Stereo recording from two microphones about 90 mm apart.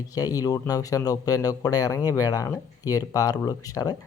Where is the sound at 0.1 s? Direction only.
40° left (ahead or behind).